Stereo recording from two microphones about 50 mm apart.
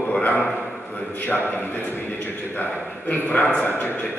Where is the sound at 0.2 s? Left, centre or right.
Left.